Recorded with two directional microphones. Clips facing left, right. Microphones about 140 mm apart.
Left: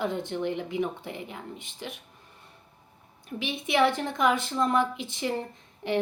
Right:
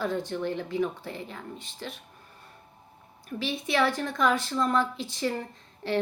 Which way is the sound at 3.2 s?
20° left (ahead or behind).